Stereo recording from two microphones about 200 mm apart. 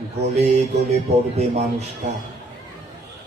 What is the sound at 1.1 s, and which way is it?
Speech, 30° right (ahead or behind).